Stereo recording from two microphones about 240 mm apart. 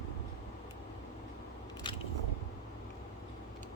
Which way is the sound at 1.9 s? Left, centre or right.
Centre.